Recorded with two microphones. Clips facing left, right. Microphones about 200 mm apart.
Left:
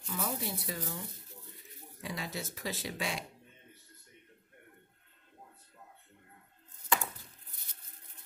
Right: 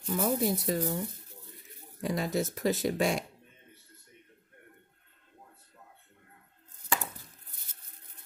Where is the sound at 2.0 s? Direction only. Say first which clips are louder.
Right 10 dB; 45° right (ahead or behind).